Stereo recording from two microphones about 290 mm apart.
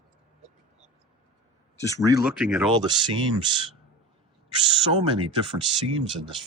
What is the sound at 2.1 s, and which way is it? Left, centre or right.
Speech, centre.